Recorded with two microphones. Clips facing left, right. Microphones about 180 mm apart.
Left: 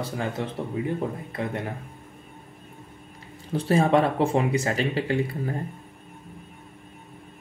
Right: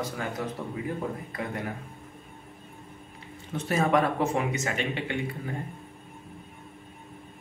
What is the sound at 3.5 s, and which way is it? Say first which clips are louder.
Speech: left 4 dB; 30° left (ahead or behind).